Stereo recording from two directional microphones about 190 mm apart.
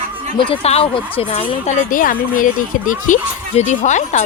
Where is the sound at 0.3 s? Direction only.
25° left (ahead or behind).